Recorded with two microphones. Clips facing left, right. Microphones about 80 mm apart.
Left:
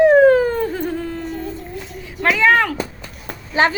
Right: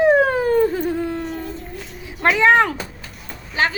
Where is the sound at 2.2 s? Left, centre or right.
Right.